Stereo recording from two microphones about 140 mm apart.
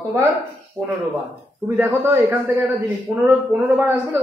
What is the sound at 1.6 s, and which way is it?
Speech, 15° right (ahead or behind).